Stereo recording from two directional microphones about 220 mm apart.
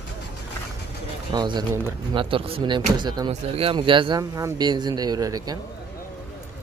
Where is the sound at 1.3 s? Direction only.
20° right (ahead or behind).